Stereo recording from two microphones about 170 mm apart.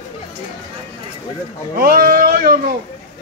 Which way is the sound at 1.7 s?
60° right (ahead or behind).